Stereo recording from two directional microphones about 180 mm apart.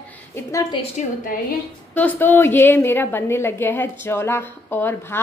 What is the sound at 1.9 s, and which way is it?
A woman's voice, 10° left (ahead or behind).